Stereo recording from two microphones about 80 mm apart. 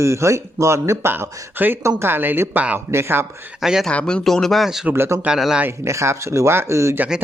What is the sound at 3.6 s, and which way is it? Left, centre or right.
Speech, centre.